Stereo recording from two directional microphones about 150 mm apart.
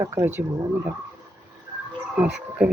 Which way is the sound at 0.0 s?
15° right (ahead or behind).